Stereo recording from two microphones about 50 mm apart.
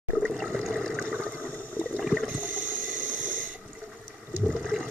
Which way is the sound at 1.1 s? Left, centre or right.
Left.